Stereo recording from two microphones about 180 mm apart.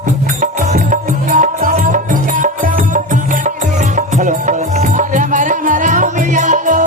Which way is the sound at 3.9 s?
45° right (ahead or behind).